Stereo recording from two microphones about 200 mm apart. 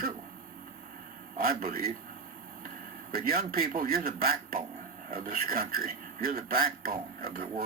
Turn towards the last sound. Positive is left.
turn(degrees=-45)  # may be behind; listen again after turning